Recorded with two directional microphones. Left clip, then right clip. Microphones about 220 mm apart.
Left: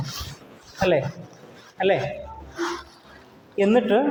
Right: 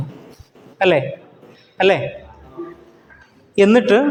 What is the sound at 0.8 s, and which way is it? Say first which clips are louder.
A man's voice: right 6 dB; 40° right (ahead or behind).